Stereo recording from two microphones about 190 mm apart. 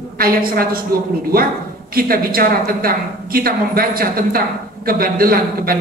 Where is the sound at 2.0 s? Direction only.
50° right (ahead or behind).